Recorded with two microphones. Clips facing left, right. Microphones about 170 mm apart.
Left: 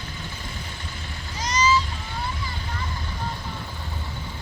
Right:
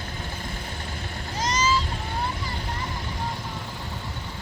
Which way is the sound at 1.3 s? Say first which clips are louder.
Left 2 dB; 50° right (ahead or behind).